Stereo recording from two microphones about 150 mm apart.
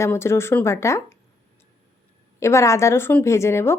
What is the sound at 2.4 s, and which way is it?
A woman's voice, 20° left (ahead or behind).